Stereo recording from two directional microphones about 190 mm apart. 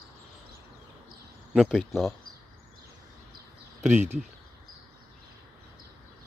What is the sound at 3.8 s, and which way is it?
Speech, 10° right (ahead or behind).